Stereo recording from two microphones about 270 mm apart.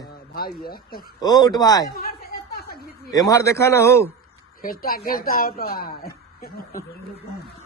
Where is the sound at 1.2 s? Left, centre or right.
Centre.